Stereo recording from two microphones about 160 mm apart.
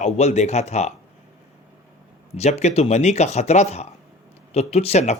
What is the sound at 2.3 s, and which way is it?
Speech, 45° left (ahead or behind).